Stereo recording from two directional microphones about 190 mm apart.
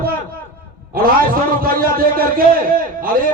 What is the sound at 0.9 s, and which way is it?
A man's voice, 50° right (ahead or behind).